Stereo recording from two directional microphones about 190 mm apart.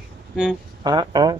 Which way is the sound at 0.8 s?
20° right (ahead or behind).